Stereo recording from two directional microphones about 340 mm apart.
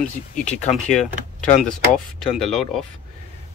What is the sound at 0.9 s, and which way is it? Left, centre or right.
Speech, centre.